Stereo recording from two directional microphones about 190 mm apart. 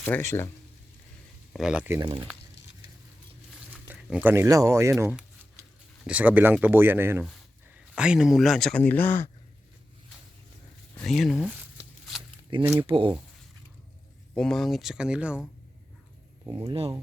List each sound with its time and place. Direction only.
0.0 s speech: 10° left (ahead or behind)
1.5 s speech: 5° right (ahead or behind)
2.0 s speech: 25° right (ahead or behind)
3.7 s speech: 10° right (ahead or behind); by 9.3 s 10° left (ahead or behind)
10.9 s speech: centre (ahead or behind)
12.8 s speech: 25° right (ahead or behind)
14.3 s speech: centre (ahead or behind)
16.5 s speech: 25° right (ahead or behind)